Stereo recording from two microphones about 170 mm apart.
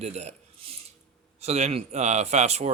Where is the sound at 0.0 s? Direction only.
40° right (ahead or behind).